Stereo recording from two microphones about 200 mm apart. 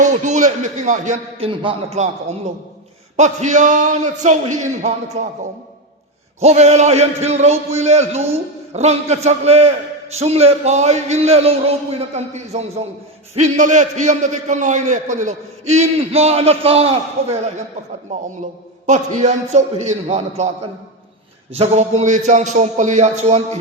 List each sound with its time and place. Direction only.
0.0 s a man's voice: 35° right (ahead or behind)
3.2 s a man's voice: 35° right (ahead or behind)
6.4 s a man's voice: 35° right (ahead or behind)
21.5 s a man's voice: 35° right (ahead or behind)